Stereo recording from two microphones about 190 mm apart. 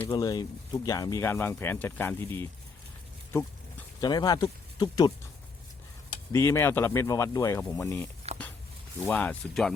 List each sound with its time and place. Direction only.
0.1 s speech: 20° left (ahead or behind)
6.3 s speech: 15° left (ahead or behind)